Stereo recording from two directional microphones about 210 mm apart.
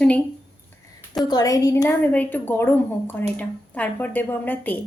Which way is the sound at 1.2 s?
20° left (ahead or behind).